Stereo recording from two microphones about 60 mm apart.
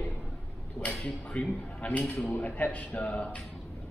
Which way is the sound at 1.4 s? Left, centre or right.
Centre.